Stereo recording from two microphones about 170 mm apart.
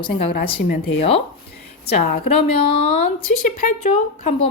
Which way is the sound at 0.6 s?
65° left (ahead or behind).